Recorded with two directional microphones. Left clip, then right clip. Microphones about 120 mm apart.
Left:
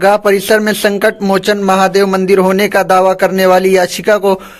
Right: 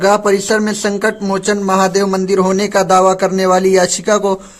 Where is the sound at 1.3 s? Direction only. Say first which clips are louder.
Left 3 dB; 20° left (ahead or behind).